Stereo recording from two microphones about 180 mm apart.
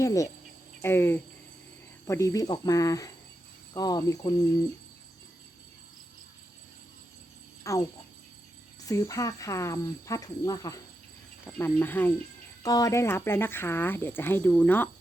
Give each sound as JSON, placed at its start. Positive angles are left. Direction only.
{"t": 0.0, "sound": "speech", "side_deg": 15}
{"t": 7.6, "sound": "speech", "side_deg": 15}
{"t": 8.9, "sound": "speech", "side_deg": 20}